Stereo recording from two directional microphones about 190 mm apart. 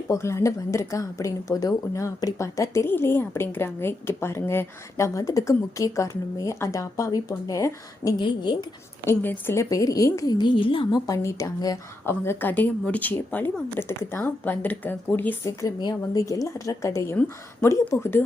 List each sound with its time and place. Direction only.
0.1 s a woman's voice: 15° left (ahead or behind)